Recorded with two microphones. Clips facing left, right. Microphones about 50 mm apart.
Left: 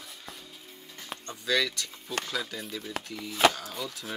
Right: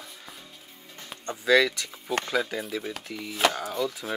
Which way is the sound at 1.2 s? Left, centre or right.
Centre.